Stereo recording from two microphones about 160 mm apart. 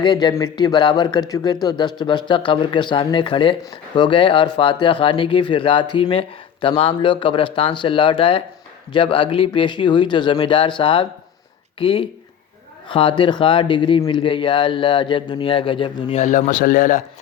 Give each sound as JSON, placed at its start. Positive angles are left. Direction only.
{"t": 0.0, "sound": "speech", "side_deg": 30}